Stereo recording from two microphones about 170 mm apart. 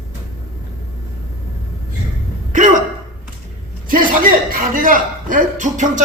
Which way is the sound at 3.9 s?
55° right (ahead or behind).